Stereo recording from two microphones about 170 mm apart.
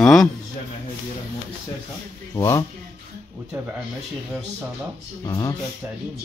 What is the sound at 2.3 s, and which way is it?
Speech, 20° left (ahead or behind).